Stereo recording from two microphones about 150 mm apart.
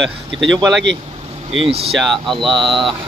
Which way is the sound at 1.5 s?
40° right (ahead or behind).